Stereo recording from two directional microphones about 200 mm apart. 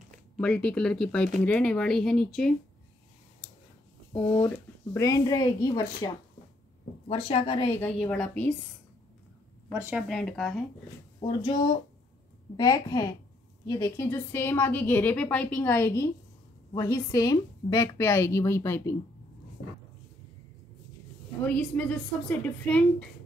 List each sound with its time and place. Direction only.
0.4 s speech: 5° left (ahead or behind)
4.9 s a woman's voice: 15° left (ahead or behind)
7.1 s speech: 30° left (ahead or behind)
7.6 s a woman's voice: 10° left (ahead or behind)
9.8 s speech: 10° right (ahead or behind)
10.0 s speech: centre (ahead or behind)
11.1 s a woman's voice: 25° left (ahead or behind)
21.5 s a woman's voice: 5° left (ahead or behind)